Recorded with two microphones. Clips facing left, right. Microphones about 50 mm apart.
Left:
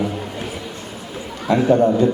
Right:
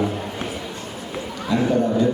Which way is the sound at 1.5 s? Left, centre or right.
Left.